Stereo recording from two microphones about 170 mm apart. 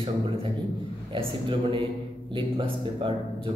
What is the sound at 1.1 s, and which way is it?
A man's voice, 30° right (ahead or behind).